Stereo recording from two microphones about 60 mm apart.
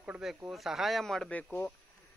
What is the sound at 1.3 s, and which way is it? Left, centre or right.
Speech, left.